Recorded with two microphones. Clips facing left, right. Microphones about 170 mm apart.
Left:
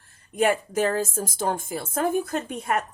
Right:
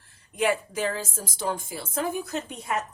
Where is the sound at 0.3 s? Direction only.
45° left (ahead or behind).